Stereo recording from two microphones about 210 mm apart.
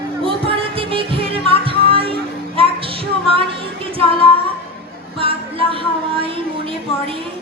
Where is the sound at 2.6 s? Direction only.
25° right (ahead or behind).